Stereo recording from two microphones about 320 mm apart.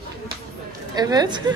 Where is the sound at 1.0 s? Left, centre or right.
Centre.